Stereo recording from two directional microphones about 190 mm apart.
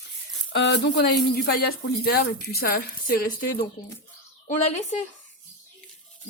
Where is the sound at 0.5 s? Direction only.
65° left (ahead or behind).